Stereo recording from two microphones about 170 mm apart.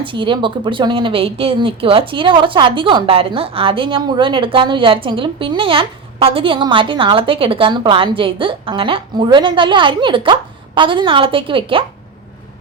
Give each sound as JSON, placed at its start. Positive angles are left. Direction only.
{"t": 0.0, "sound": "speech", "side_deg": -30}